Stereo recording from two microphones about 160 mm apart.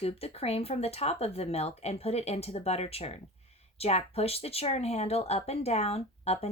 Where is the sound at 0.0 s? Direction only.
40° left (ahead or behind).